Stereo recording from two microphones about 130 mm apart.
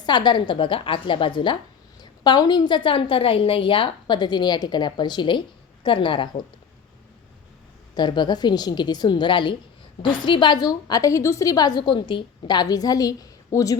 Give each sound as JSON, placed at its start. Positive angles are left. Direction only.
{"t": 0.0, "sound": "a woman's voice", "side_deg": 35}
{"t": 7.9, "sound": "a woman's voice", "side_deg": 35}